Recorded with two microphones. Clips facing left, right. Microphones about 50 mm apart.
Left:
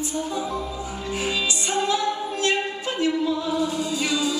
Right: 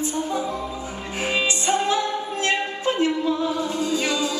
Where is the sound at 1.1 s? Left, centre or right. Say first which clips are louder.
Right 3 dB; right.